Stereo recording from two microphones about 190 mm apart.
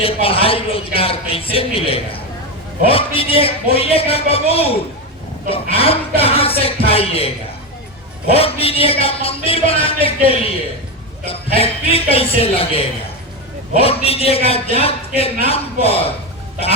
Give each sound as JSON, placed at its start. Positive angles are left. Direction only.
{"t": 0.0, "sound": "a man's voice", "side_deg": 30}
{"t": 8.3, "sound": "a man's voice", "side_deg": 30}